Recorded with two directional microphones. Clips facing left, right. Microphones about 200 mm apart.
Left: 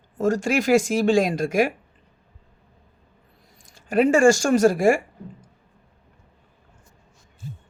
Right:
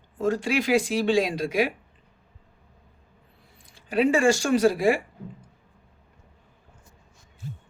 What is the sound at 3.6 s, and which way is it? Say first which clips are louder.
Speech: left 3 dB; 45° left (ahead or behind).